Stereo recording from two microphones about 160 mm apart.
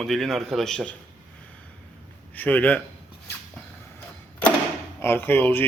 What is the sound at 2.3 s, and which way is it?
Speech, 10° left (ahead or behind).